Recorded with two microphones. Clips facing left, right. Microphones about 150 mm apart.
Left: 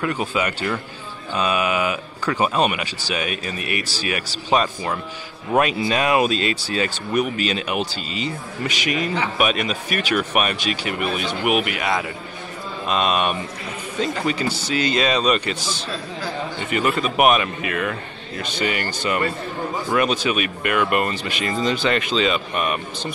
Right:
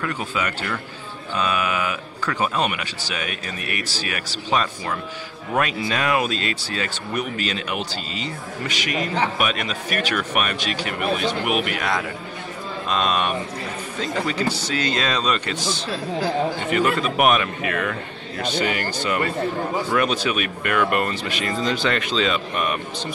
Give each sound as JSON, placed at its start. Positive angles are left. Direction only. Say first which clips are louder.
{"t": 0.0, "sound": "speech", "louder": "left 3 dB", "side_deg": 20}
{"t": 16.7, "sound": "speech", "louder": "left 1 dB", "side_deg": 5}
{"t": 19.9, "sound": "speech", "louder": "left 3 dB", "side_deg": 5}